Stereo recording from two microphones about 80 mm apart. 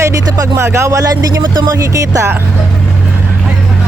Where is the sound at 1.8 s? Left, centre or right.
Right.